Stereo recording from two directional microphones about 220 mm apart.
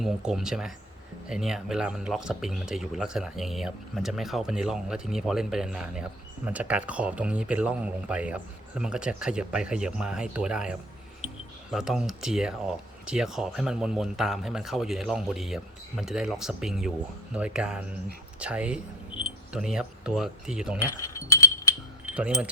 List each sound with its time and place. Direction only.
0.0 s speech: centre (ahead or behind)
20.9 s a sound: 15° left (ahead or behind)
22.0 s keys jangling: 5° right (ahead or behind)